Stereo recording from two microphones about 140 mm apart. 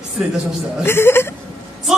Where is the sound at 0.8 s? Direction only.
15° left (ahead or behind).